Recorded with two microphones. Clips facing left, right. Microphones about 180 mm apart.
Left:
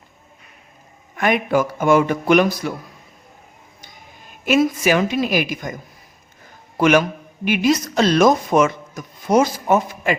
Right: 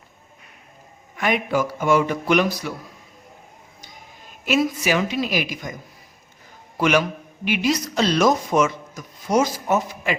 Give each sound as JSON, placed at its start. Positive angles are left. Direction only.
{"t": 1.1, "sound": "speech", "side_deg": 50}
{"t": 4.4, "sound": "speech", "side_deg": 50}
{"t": 6.7, "sound": "a man's voice", "side_deg": 50}